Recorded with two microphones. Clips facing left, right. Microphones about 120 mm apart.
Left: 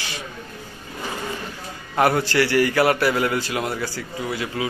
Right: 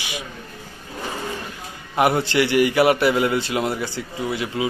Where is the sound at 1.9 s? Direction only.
20° right (ahead or behind).